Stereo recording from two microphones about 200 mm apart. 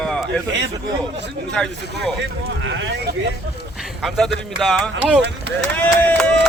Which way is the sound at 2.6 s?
65° right (ahead or behind).